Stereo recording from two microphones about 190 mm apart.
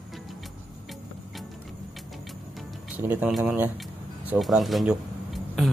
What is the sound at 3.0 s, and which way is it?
Speech, 10° right (ahead or behind).